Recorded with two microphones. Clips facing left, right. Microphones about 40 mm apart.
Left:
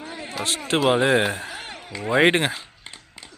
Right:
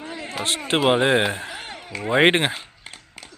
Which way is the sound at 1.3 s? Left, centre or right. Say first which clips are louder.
Even; centre.